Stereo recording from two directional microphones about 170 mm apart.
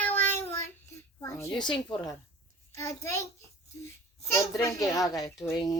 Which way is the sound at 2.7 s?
15° left (ahead or behind).